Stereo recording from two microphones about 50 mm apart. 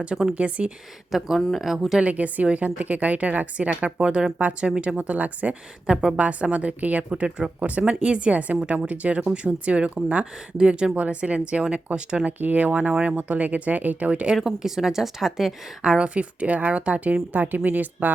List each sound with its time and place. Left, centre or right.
0.3 s a woman's voice: right
1.1 s a woman's voice: centre
2.0 s a woman's voice: right
7.6 s a woman's voice: right
14.3 s a woman's voice: centre
15.8 s a woman's voice: right